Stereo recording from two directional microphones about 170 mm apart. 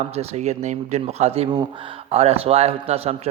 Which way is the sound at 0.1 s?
40° right (ahead or behind).